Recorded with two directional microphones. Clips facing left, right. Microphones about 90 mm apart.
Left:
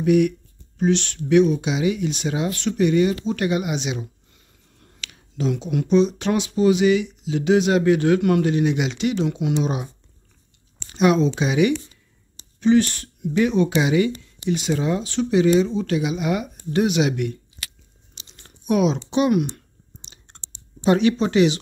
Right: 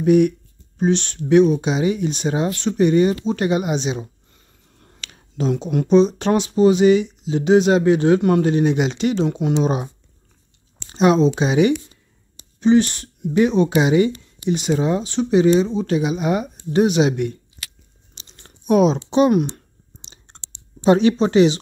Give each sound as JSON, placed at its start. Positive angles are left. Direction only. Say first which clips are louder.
{"t": 0.0, "sound": "speech", "louder": "right 3 dB", "side_deg": -35}
{"t": 10.9, "sound": "speech", "louder": "right 3 dB", "side_deg": -30}
{"t": 18.1, "sound": "crumpling", "louder": "right 1 dB", "side_deg": -35}
{"t": 20.3, "sound": "clicking", "louder": "right 3 dB", "side_deg": -30}
{"t": 20.8, "sound": "speech", "louder": "right 3 dB", "side_deg": -25}